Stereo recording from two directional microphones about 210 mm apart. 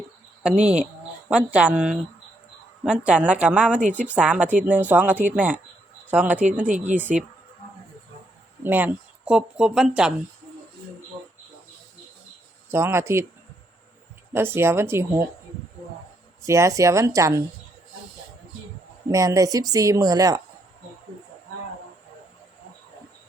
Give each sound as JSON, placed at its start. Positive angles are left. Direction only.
{"t": 0.6, "sound": "speech", "side_deg": -5}
{"t": 3.8, "sound": "speech", "side_deg": -35}
{"t": 4.0, "sound": "speech", "side_deg": -5}
{"t": 6.7, "sound": "speech", "side_deg": -35}
{"t": 6.9, "sound": "speech", "side_deg": -5}
{"t": 8.6, "sound": "speech", "side_deg": -10}
{"t": 12.7, "sound": "speech", "side_deg": -10}
{"t": 14.3, "sound": "speech", "side_deg": -10}
{"t": 16.5, "sound": "speech", "side_deg": -15}
{"t": 19.0, "sound": "speech", "side_deg": -15}